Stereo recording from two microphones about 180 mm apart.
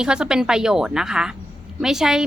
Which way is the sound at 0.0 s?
5° right (ahead or behind).